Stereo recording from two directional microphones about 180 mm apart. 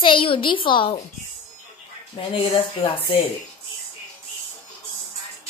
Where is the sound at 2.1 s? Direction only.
30° left (ahead or behind).